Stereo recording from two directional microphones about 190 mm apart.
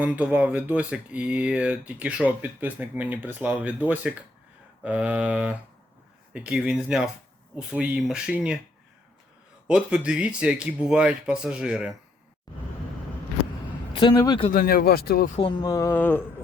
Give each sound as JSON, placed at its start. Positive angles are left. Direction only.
{"t": 0.0, "sound": "speech", "side_deg": -5}
{"t": 9.6, "sound": "speech", "side_deg": -5}
{"t": 12.5, "sound": "vehicle", "side_deg": 20}
{"t": 13.9, "sound": "a man's voice", "side_deg": 25}
{"t": 14.5, "sound": "speech", "side_deg": 50}
{"t": 15.4, "sound": "speech", "side_deg": 25}